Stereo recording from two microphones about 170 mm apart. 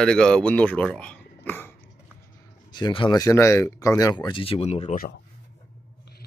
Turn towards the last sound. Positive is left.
turn(degrees=40)  # may be behind; listen again after turning